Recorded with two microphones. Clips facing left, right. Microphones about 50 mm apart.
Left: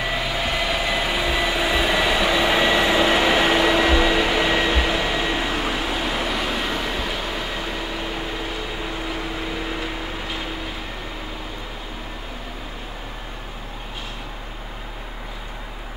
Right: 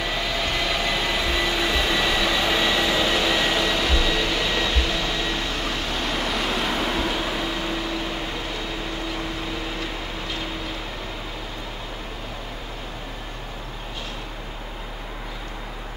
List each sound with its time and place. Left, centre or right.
0.0 s vehicle: centre